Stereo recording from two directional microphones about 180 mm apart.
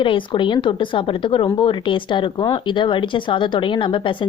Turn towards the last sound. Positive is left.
turn(degrees=25)  # may be behind; listen again after turning